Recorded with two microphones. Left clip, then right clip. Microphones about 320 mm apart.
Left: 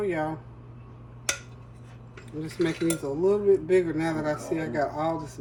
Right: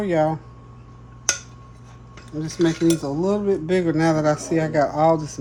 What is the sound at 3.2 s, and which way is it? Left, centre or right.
A man's voice, right.